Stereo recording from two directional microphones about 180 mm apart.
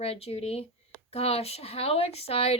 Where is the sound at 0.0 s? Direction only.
35° left (ahead or behind).